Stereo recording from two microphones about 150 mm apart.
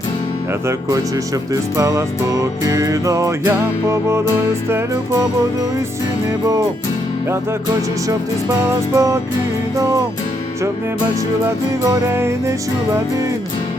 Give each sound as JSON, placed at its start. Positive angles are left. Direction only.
{"t": 1.7, "sound": "music", "side_deg": -20}
{"t": 8.6, "sound": "music", "side_deg": -20}
{"t": 11.8, "sound": "music", "side_deg": -20}